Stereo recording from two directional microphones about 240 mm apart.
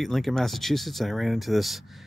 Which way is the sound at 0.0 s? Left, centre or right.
Centre.